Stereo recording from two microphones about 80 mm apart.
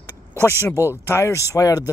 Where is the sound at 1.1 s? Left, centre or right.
Left.